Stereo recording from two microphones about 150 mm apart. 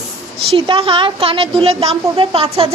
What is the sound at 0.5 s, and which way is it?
A woman's voice, 35° right (ahead or behind).